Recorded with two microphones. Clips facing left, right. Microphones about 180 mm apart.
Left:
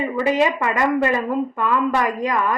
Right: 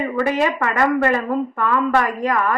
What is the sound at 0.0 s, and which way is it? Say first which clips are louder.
A woman's voice: even; 15° left (ahead or behind).